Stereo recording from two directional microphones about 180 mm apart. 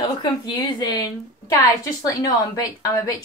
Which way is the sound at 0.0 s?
25° left (ahead or behind).